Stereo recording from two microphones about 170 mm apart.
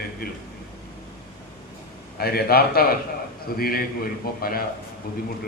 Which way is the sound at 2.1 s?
65° left (ahead or behind).